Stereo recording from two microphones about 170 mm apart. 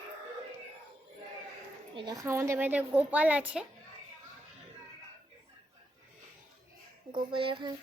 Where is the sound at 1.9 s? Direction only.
25° right (ahead or behind); by 3.6 s 10° right (ahead or behind).